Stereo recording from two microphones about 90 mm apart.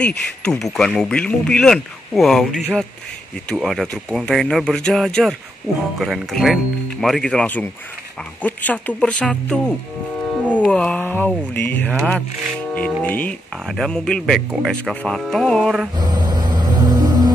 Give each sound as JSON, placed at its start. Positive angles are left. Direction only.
{"t": 0.0, "sound": "speech", "side_deg": 5}
{"t": 7.4, "sound": "speech", "side_deg": 20}
{"t": 13.7, "sound": "speech", "side_deg": 5}
{"t": 16.0, "sound": "music", "side_deg": -50}